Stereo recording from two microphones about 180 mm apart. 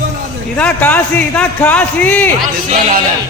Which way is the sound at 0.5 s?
10° left (ahead or behind).